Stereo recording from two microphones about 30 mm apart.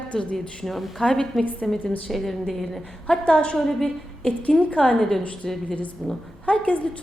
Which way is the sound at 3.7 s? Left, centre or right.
Centre.